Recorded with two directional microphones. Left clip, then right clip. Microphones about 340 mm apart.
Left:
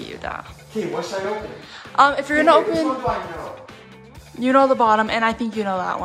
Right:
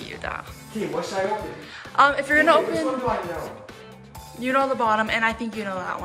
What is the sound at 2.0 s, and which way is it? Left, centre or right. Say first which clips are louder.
Speech: left 2 dB; centre.